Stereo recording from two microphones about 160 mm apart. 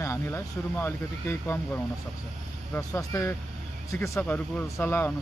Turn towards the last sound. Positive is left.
turn(degrees=15)  # may be behind; listen again after turning